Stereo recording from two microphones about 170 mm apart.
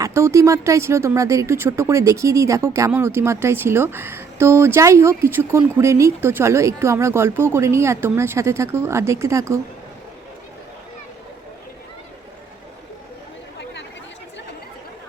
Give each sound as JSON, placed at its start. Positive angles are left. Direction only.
{"t": 0.0, "sound": "speech", "side_deg": -15}